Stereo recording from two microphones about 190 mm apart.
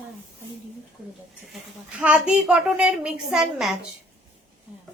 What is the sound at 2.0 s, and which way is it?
A woman's voice, 5° right (ahead or behind).